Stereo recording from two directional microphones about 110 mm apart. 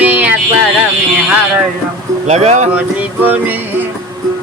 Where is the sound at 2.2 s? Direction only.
80° right.